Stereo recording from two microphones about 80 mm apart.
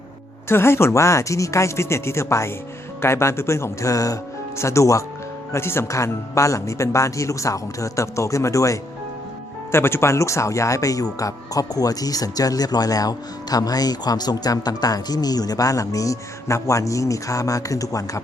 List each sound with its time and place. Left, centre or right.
0.4 s speech: left
9.7 s speech: left